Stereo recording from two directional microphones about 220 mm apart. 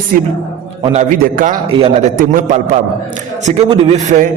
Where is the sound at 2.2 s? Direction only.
35° right (ahead or behind).